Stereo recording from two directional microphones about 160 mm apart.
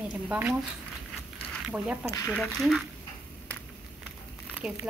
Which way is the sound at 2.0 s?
20° left (ahead or behind).